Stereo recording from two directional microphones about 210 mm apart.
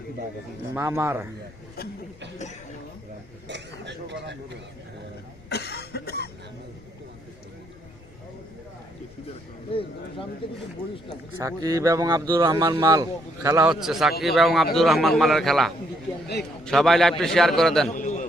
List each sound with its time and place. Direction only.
0.7 s speech: 15° right (ahead or behind)
3.4 s speech: 55° right (ahead or behind)
5.5 s cough: 50° left (ahead or behind)
9.7 s speech: 25° left (ahead or behind)
11.3 s speech: 15° right (ahead or behind)
13.7 s a man's voice: centre (ahead or behind)
17.8 s bird: 35° left (ahead or behind)